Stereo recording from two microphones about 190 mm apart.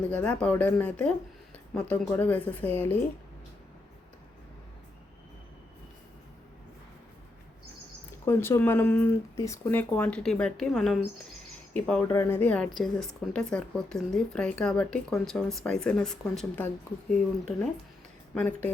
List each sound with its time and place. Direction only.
0.1 s speech: 5° left (ahead or behind)
8.2 s a woman's voice: 15° left (ahead or behind)
18.3 s speech: 10° left (ahead or behind)